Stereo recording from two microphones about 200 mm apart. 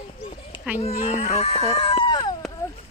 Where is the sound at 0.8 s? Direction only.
35° left (ahead or behind).